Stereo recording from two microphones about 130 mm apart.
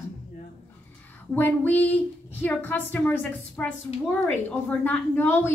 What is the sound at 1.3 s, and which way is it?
A woman's voice, 15° left (ahead or behind).